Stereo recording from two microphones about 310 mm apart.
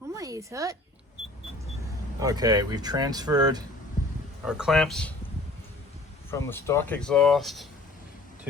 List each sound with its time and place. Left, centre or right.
0.1 s a sound: centre
2.1 s speech: centre
4.4 s speech: centre
6.3 s speech: centre